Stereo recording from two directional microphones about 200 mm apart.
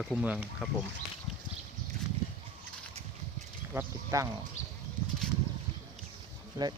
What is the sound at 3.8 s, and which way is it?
Speech, 15° right (ahead or behind).